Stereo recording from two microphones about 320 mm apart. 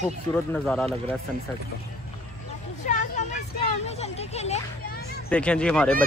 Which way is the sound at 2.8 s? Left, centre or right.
Left.